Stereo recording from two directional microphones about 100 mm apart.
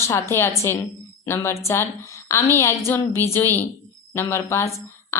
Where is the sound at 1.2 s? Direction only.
25° left (ahead or behind).